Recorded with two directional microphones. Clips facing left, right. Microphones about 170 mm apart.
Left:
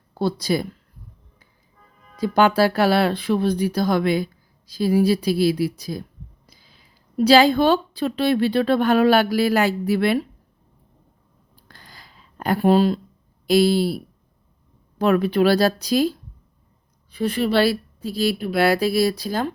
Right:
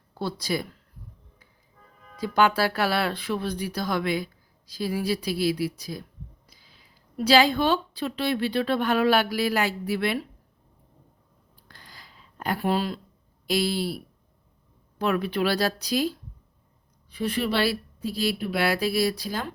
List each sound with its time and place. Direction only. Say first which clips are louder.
0.1 s speech: left 7 dB; 35° left (ahead or behind)
2.2 s speech: left 5 dB; 30° left (ahead or behind)
7.3 s speech: left 5 dB; 35° left (ahead or behind)
11.7 s a sound: left 3 dB; 45° left (ahead or behind)
13.5 s speech: left 9 dB; 35° left (ahead or behind)
17.2 s speech: left 6 dB; 40° left (ahead or behind)